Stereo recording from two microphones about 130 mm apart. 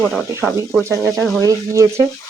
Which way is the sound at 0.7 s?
20° right (ahead or behind).